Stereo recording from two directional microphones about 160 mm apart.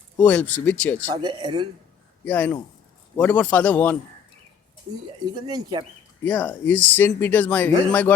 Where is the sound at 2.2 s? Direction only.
10° left (ahead or behind).